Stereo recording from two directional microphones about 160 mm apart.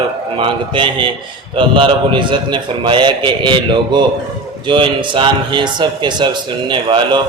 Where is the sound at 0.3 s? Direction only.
30° right (ahead or behind).